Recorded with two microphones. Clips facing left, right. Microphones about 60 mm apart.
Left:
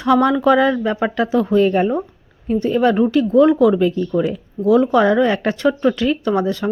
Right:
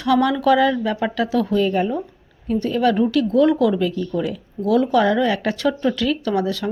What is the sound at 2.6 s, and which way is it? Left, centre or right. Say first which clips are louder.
Speech: left 3 dB; left.